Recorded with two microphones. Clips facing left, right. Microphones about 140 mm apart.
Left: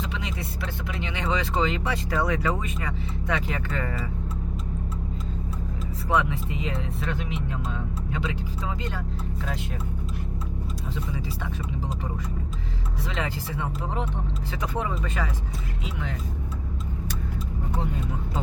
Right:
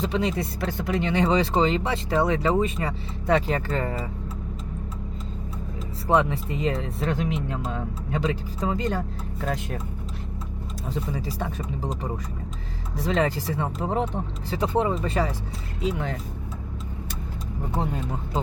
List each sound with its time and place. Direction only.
0.0 s speech: 35° right (ahead or behind)
6.1 s speech: 35° right (ahead or behind)
10.9 s speech: 40° right (ahead or behind)
13.0 s speech: 40° right (ahead or behind)
14.5 s speech: 30° right (ahead or behind)